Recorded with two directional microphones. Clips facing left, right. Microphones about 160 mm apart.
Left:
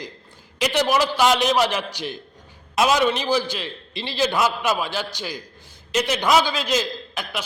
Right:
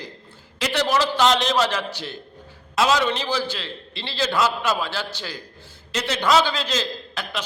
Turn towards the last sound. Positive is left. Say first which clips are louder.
# even
turn(degrees=15)  # may be behind; listen again after turning